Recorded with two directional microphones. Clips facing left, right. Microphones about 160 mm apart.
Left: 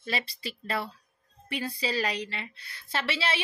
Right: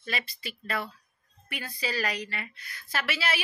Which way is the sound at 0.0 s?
30° left (ahead or behind).